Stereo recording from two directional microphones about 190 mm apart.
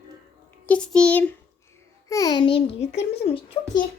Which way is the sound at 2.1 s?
20° left (ahead or behind).